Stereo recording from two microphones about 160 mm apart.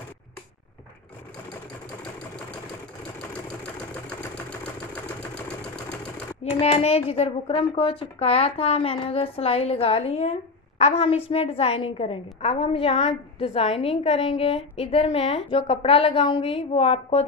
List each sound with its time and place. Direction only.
3.2 s engine: 5° left (ahead or behind)
6.6 s a woman's voice: 40° left (ahead or behind)